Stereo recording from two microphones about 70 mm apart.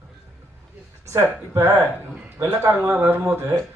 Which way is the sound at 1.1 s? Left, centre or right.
Right.